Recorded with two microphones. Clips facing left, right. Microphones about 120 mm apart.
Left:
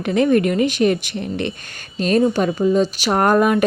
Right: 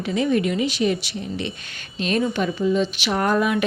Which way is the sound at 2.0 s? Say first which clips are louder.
Left 6 dB; 40° left (ahead or behind).